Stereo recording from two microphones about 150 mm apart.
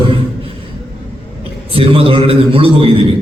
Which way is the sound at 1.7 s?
40° right (ahead or behind).